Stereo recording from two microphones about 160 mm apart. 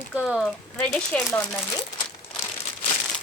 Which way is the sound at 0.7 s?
10° left (ahead or behind).